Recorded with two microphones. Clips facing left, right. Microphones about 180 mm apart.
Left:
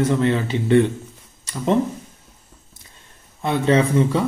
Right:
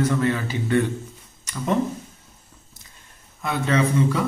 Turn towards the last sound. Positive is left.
turn(degrees=30)  # may be behind; listen again after turning